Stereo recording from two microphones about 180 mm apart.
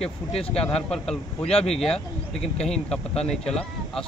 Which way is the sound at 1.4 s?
35° left (ahead or behind).